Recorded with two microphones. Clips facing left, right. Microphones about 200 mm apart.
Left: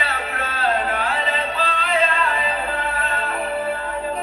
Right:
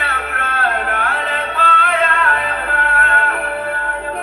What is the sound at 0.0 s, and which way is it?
Music, 65° right (ahead or behind).